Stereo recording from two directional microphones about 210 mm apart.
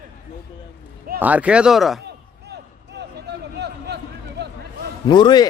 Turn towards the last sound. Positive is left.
turn(degrees=20)  # may be behind; listen again after turning